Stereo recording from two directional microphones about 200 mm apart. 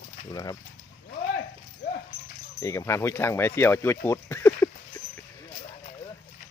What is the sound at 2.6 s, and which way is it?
Speech, 15° left (ahead or behind).